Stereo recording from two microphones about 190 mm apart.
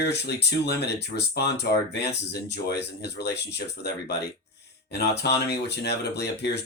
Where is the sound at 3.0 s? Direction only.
60° left (ahead or behind).